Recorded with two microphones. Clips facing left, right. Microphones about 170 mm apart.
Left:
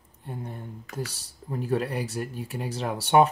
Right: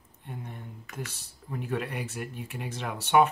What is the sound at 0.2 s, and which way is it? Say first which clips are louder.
Speech: left 4 dB; 35° left (ahead or behind).